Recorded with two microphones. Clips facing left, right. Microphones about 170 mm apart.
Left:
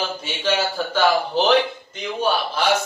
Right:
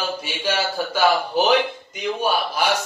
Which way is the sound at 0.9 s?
10° right (ahead or behind).